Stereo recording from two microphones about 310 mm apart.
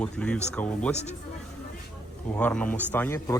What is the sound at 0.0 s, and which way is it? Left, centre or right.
Speech, centre.